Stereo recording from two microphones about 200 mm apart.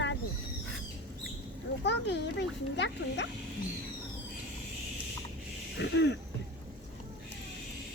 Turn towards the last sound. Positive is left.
turn(degrees=60)  # may be behind; listen again after turning